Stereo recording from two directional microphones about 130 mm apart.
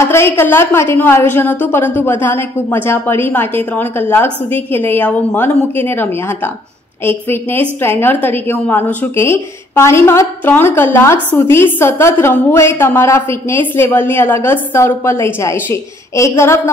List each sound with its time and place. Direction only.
0.0 s a woman's voice: 20° left (ahead or behind)